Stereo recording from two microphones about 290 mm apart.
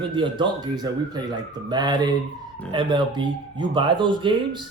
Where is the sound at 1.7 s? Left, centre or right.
Centre.